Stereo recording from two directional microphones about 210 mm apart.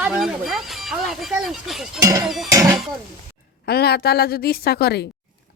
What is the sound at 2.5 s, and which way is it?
Speech, 15° right (ahead or behind).